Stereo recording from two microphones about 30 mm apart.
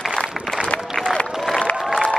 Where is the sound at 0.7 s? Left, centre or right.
Left.